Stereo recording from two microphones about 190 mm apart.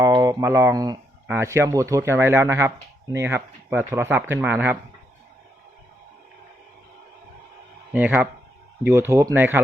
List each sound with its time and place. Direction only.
0.0 s speech: 20° right (ahead or behind)
7.9 s speech: 10° right (ahead or behind)